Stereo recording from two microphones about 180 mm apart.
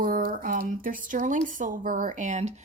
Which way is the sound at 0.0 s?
50° right (ahead or behind).